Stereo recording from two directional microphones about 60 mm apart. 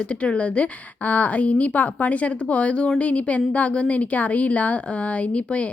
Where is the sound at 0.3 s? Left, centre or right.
Left.